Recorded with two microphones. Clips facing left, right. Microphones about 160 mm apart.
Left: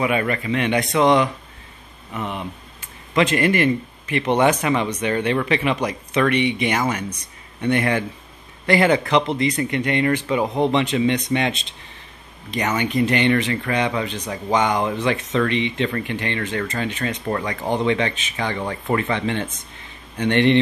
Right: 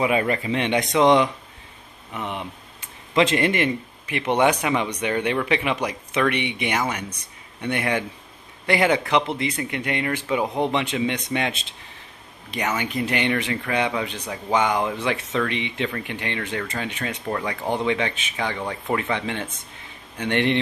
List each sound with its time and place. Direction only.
0.0 s speech: 25° right (ahead or behind); by 17.6 s 5° right (ahead or behind)
17.6 s speech: 15° left (ahead or behind)
17.8 s speech: 10° right (ahead or behind)